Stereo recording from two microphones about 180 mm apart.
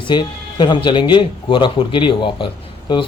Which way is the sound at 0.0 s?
25° left (ahead or behind).